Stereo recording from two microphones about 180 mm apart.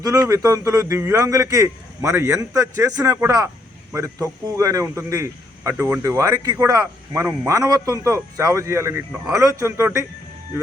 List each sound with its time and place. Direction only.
0.0 s a man's voice: 20° right (ahead or behind)